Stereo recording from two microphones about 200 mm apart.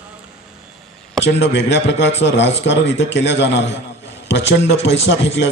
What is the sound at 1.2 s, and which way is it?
A man's voice, 60° left (ahead or behind).